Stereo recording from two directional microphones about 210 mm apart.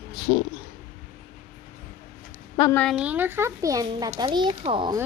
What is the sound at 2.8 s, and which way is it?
A child's voice, 5° right (ahead or behind).